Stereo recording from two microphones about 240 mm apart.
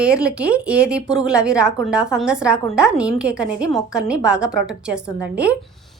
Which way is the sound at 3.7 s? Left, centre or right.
Centre.